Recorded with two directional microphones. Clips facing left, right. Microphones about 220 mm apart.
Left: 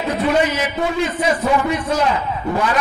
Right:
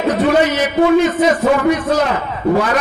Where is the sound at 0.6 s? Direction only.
45° right (ahead or behind).